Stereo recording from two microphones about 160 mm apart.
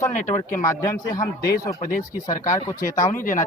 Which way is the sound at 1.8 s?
60° left (ahead or behind).